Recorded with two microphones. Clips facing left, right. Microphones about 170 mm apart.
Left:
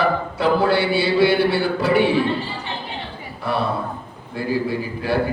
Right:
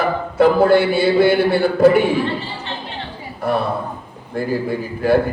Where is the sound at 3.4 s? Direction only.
45° right (ahead or behind).